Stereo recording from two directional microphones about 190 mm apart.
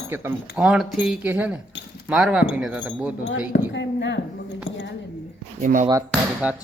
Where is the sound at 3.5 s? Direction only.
70° left (ahead or behind).